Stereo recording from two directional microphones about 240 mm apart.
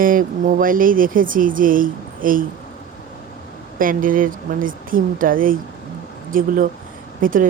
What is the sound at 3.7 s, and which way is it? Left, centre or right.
Speech, right.